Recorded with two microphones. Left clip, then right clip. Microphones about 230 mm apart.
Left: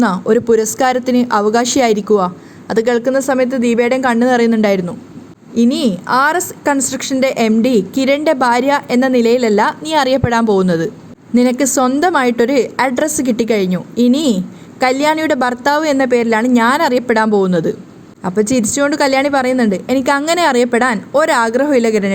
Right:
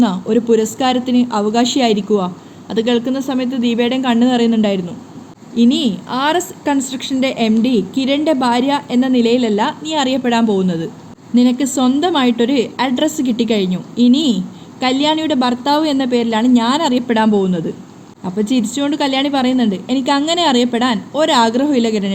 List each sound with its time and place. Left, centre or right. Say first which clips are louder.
0.0 s a woman's voice: left 3 dB; left
5.9 s a woman's voice: left 4 dB; left
11.3 s a woman's voice: left 3 dB; left
18.2 s a woman's voice: left 4 dB; left